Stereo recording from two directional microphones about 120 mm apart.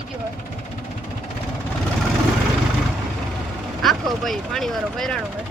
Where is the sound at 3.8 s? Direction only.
Centre (ahead or behind).